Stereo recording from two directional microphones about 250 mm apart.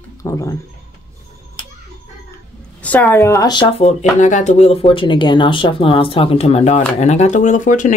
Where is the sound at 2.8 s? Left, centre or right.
Centre.